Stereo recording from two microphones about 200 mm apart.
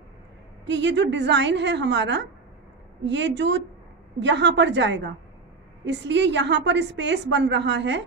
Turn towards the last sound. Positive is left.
turn(degrees=-60)  # may be behind; listen again after turning